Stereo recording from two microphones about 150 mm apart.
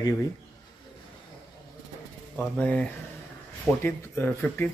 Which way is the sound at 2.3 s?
10° left (ahead or behind).